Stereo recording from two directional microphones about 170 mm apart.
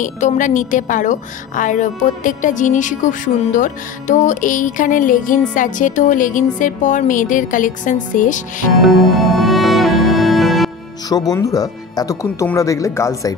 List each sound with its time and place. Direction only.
0.0 s a woman's voice: 45° left (ahead or behind)
8.8 s music: centre (ahead or behind)
11.1 s speech: 20° left (ahead or behind)